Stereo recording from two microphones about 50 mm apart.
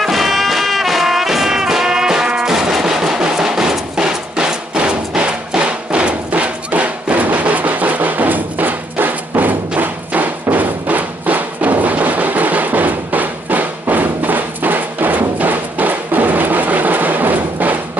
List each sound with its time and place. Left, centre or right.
0.0 s music: centre; by 17.7 s right